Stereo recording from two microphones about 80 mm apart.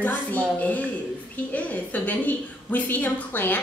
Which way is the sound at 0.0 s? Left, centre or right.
Left.